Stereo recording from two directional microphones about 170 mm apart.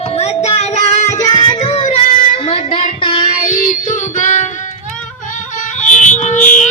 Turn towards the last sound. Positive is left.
turn(degrees=50)  # may be behind; listen again after turning